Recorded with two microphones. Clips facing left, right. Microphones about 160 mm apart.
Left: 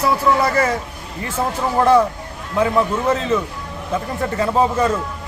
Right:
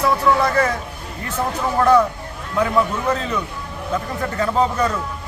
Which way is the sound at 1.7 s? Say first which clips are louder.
Left 1 dB; 30° left (ahead or behind).